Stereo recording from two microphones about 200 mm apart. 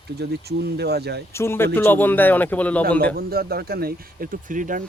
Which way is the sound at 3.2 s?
50° right (ahead or behind).